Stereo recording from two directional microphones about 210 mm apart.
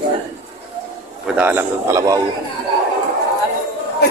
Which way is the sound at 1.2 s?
5° right (ahead or behind).